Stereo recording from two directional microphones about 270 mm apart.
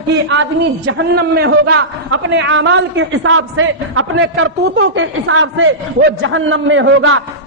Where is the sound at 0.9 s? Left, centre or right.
Right.